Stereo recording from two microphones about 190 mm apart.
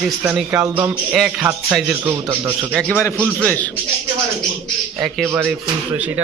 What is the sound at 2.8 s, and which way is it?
Speech, 5° left (ahead or behind).